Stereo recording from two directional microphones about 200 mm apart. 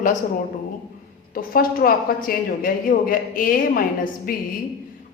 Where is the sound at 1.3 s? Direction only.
45° left (ahead or behind).